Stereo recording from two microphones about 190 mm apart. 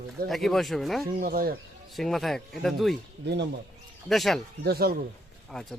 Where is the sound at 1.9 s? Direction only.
Centre (ahead or behind).